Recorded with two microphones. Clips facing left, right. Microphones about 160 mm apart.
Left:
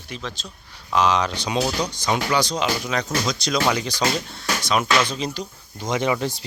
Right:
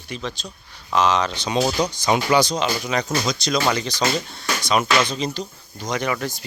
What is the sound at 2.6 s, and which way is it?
Speech, centre (ahead or behind).